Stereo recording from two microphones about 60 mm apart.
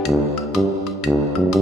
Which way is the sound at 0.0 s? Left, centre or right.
Centre.